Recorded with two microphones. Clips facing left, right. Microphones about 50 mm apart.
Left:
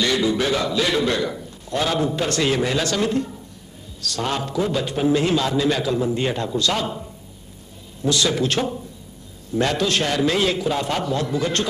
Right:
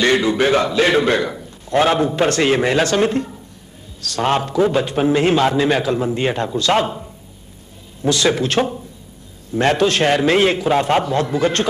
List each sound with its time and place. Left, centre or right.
0.0 s a man's voice: right